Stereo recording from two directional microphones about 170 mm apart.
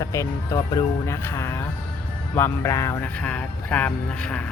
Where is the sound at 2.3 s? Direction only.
15° left (ahead or behind).